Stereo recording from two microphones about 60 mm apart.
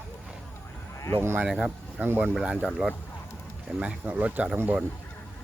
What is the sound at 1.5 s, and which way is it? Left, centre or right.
Speech, centre.